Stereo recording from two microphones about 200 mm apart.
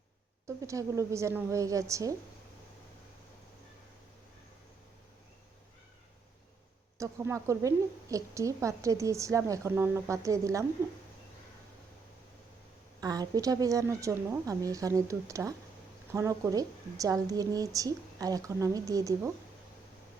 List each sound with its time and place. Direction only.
0.4 s a woman's voice: 15° right (ahead or behind)
7.0 s a woman's voice: 15° right (ahead or behind)
13.0 s a woman's voice: 20° right (ahead or behind)